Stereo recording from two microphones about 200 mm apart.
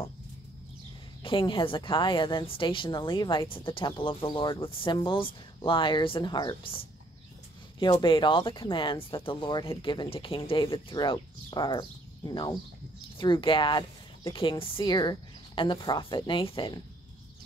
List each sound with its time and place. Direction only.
1.2 s a woman's voice: 25° left (ahead or behind)